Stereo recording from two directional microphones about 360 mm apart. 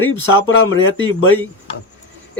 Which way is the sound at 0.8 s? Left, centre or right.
Left.